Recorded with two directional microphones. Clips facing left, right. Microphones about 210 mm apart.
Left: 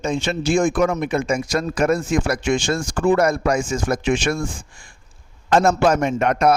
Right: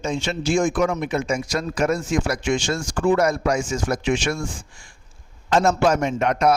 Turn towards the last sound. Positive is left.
turn(degrees=55)  # may be behind; listen again after turning